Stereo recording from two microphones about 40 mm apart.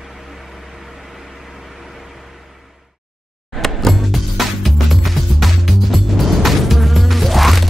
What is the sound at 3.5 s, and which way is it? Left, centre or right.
Music, centre.